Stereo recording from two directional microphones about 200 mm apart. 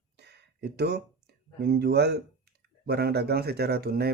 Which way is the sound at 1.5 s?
55° right (ahead or behind).